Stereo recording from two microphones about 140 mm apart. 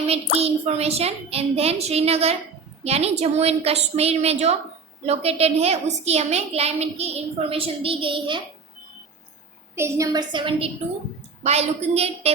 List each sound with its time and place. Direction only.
0.1 s a woman's voice: 45° right (ahead or behind)
9.7 s a woman's voice: 20° right (ahead or behind); by 10.7 s 35° right (ahead or behind)
11.4 s a woman's voice: 50° right (ahead or behind)